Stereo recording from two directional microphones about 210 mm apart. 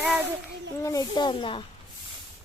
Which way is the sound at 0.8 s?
15° left (ahead or behind).